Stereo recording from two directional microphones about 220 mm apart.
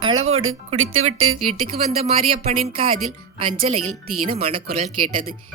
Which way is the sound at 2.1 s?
30° right (ahead or behind).